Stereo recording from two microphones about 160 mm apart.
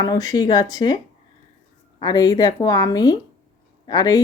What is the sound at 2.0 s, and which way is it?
Speech, 25° left (ahead or behind).